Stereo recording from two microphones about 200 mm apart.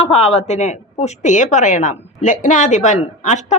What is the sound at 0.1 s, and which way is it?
A woman's voice, 30° left (ahead or behind).